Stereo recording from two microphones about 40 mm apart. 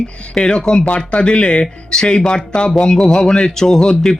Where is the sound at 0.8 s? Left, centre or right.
Left.